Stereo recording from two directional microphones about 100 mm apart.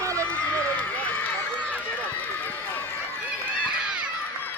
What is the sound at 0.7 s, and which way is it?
Run, 15° left (ahead or behind).